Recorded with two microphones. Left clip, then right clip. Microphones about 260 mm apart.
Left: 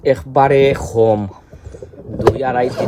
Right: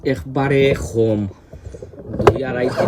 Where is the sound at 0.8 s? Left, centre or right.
Centre.